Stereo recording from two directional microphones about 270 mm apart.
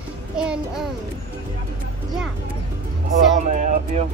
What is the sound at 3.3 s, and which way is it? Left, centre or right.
Speech, right.